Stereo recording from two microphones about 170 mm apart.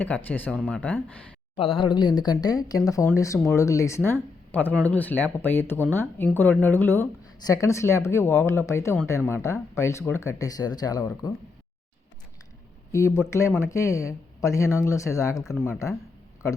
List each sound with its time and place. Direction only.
0.0 s speech: 10° left (ahead or behind)
1.5 s speech: 30° left (ahead or behind)
12.9 s speech: 15° left (ahead or behind)